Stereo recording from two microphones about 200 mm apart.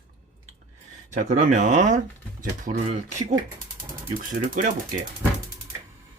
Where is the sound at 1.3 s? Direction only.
35° right (ahead or behind).